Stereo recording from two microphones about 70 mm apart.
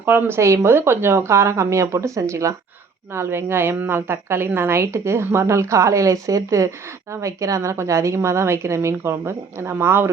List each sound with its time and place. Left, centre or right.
0.0 s speech: right
0.3 s a woman's voice: right
3.2 s a woman's voice: right